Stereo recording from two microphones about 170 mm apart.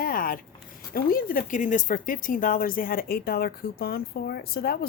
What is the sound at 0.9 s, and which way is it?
Speech, 55° left (ahead or behind).